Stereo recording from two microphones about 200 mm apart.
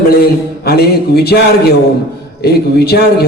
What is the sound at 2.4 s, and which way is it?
Speech, 50° left (ahead or behind).